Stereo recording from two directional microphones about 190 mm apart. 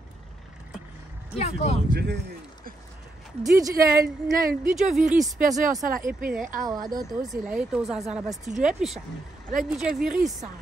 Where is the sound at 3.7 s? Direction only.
50° right (ahead or behind).